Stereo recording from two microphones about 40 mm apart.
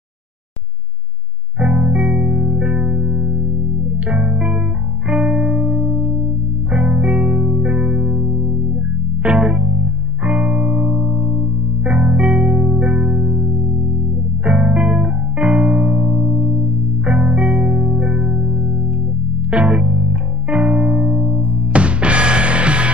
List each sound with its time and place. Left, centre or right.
1.6 s music: right
11.1 s music: right